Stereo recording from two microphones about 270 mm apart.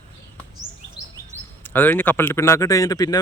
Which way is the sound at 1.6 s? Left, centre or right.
Centre.